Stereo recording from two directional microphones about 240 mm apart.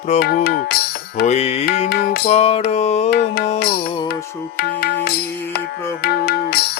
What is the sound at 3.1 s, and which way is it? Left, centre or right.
Music, left.